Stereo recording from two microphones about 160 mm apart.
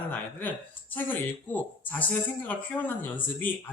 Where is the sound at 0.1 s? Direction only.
10° left (ahead or behind).